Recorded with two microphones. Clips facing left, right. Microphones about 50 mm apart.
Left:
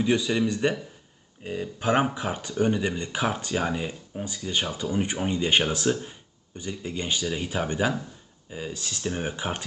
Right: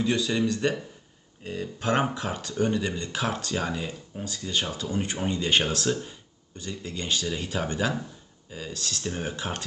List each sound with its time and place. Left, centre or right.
0.0 s speech: centre